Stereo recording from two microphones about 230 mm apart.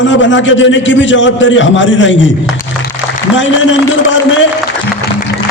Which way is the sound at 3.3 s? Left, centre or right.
Left.